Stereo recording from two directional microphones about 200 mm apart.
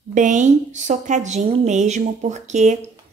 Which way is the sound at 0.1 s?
40° right (ahead or behind).